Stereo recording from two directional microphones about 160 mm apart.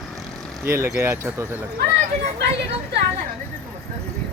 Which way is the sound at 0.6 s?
15° right (ahead or behind).